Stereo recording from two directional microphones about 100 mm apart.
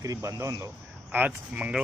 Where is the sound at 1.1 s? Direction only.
15° right (ahead or behind).